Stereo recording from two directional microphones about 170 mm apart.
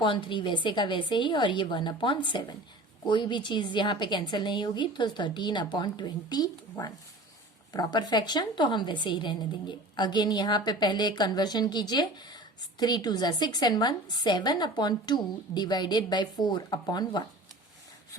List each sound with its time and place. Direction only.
0.0 s a woman's voice: 30° left (ahead or behind)